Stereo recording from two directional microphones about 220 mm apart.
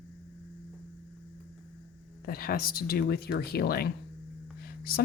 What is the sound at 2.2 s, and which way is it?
Speech, 45° left (ahead or behind).